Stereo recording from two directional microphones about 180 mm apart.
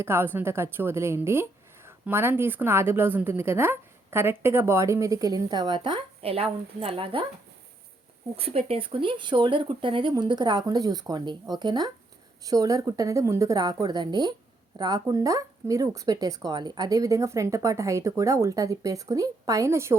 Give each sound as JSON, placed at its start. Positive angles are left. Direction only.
{"t": 0.0, "sound": "a woman's voice", "side_deg": -15}
{"t": 8.4, "sound": "speech", "side_deg": -35}